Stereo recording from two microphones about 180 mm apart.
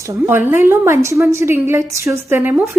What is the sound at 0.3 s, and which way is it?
A woman's voice, 10° right (ahead or behind).